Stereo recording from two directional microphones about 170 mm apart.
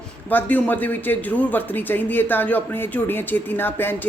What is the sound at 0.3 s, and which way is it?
A woman's voice, 10° left (ahead or behind).